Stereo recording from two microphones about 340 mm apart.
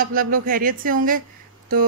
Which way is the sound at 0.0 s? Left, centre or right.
Right.